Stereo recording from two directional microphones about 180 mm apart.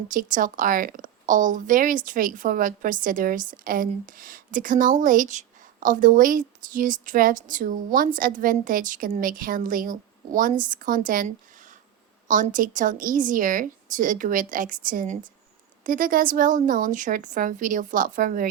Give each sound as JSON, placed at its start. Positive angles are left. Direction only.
{"t": 0.1, "sound": "a woman's voice", "side_deg": -50}
{"t": 12.3, "sound": "a woman's voice", "side_deg": -45}